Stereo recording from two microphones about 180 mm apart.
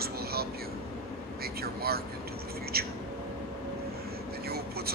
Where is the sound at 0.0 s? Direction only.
60° right (ahead or behind).